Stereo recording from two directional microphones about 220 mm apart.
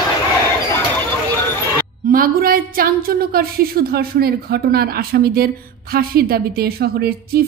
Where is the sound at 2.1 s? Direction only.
40° right (ahead or behind).